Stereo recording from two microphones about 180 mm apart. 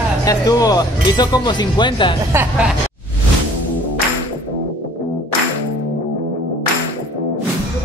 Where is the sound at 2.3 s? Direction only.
10° right (ahead or behind).